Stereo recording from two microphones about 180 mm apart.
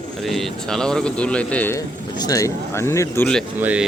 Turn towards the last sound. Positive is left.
turn(degrees=-10)  # may be behind; listen again after turning